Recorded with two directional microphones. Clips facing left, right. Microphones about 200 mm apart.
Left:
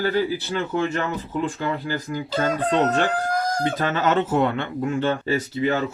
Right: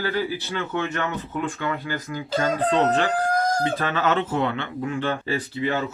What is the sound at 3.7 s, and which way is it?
Speech, 45° left (ahead or behind).